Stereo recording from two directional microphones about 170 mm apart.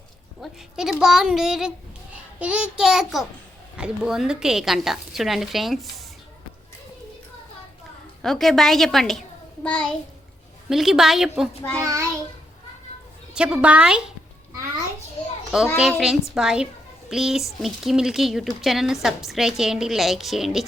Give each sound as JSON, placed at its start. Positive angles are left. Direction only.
{"t": 0.4, "sound": "a woman's voice", "side_deg": -5}
{"t": 8.2, "sound": "a woman's voice", "side_deg": 0}
{"t": 11.8, "sound": "a child's voice", "side_deg": -20}
{"t": 13.3, "sound": "a woman's voice", "side_deg": -5}
{"t": 15.5, "sound": "a woman's voice", "side_deg": 0}